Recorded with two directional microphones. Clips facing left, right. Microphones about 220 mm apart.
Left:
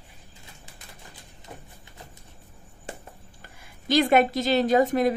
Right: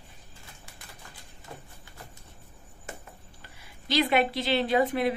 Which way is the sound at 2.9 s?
30° left (ahead or behind).